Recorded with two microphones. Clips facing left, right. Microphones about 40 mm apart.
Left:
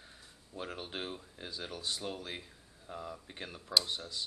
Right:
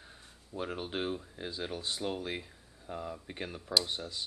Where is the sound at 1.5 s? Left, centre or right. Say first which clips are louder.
Right 2 dB; right.